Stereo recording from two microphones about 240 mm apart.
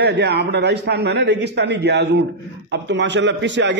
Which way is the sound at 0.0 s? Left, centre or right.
Right.